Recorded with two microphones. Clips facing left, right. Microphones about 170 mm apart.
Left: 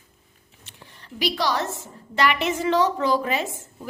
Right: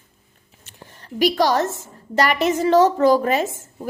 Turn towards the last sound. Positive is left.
turn(degrees=-45)  # may be behind; listen again after turning